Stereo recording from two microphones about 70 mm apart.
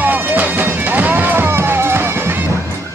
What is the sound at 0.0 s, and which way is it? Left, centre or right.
Music, right.